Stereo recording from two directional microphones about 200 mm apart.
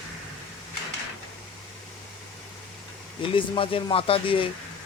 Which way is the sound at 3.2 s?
25° left (ahead or behind).